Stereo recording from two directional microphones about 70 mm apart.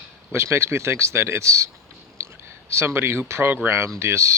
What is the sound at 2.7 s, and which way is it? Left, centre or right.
Speech, right.